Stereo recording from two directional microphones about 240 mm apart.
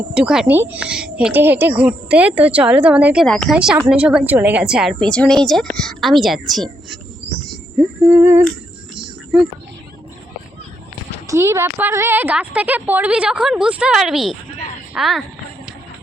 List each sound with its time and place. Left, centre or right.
0.1 s speech: centre
8.1 s humming: centre
9.0 s music: centre
11.3 s speech: centre